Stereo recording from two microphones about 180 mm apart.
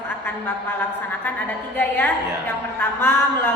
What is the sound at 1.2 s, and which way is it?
Speech, 10° left (ahead or behind).